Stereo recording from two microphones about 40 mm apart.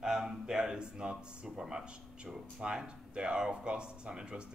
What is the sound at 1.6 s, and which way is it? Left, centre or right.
Speech, centre.